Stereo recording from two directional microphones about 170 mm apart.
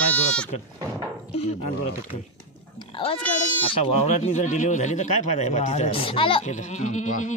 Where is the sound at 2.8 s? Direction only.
30° left (ahead or behind).